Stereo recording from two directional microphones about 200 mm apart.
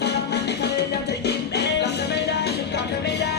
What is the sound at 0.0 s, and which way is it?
Music, 55° left (ahead or behind).